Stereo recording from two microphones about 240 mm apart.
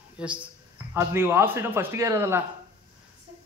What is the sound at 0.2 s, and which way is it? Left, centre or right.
A man's voice, centre.